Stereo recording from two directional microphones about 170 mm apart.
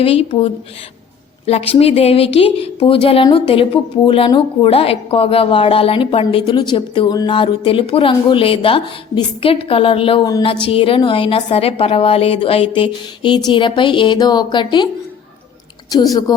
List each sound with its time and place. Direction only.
0.0 s a woman's voice: 35° left (ahead or behind)
15.9 s a woman's voice: 20° left (ahead or behind)